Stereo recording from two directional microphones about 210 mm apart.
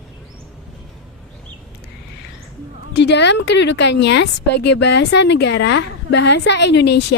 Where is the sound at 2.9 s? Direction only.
55° left (ahead or behind).